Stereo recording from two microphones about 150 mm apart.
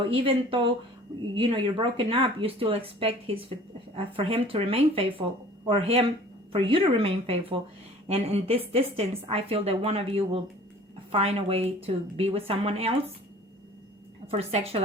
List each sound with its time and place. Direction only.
0.0 s a woman's voice: 35° right (ahead or behind)
14.3 s a woman's voice: 40° right (ahead or behind)